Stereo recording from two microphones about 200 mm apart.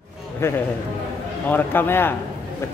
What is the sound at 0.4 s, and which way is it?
Speech, 10° left (ahead or behind).